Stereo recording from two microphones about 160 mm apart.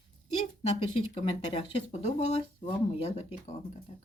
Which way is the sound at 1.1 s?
35° left (ahead or behind).